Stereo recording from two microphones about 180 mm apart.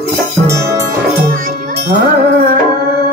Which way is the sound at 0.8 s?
55° right (ahead or behind).